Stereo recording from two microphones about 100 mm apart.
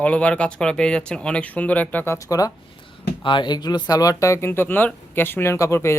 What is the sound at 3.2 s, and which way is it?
Speech, 50° left (ahead or behind).